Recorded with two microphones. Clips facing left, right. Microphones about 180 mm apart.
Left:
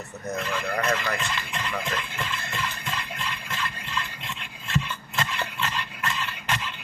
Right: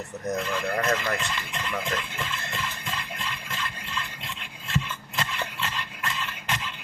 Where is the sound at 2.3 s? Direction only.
60° left (ahead or behind).